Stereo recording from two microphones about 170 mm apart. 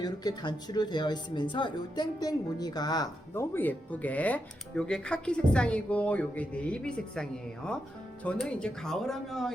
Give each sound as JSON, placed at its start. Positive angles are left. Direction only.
{"t": 0.0, "sound": "speech", "side_deg": 25}